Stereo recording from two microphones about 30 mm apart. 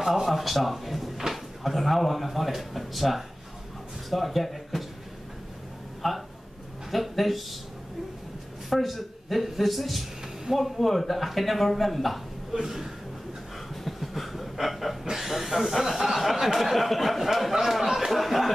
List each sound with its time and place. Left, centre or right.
0.0 s speech: centre
0.3 s speech: centre
6.0 s speech: centre
8.6 s speech: centre
12.6 s speech: centre
13.8 s a sound: centre
15.1 s speech: centre